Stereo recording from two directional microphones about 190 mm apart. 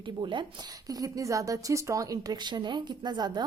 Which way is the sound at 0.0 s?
25° right (ahead or behind).